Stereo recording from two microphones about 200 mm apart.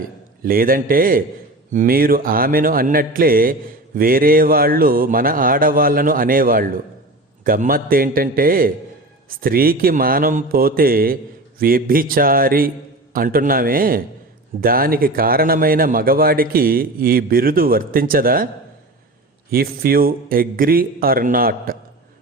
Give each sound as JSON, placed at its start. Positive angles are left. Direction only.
{"t": 0.4, "sound": "speech", "side_deg": -45}
{"t": 19.5, "sound": "speech", "side_deg": -50}